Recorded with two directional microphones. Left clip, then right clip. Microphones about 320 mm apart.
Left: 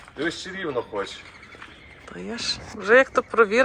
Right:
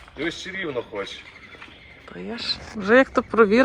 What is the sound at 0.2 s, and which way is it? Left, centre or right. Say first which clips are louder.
Speech: even; centre.